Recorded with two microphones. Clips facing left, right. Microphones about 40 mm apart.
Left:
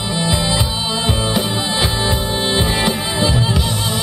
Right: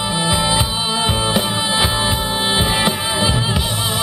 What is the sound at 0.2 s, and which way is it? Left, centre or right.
Music, centre.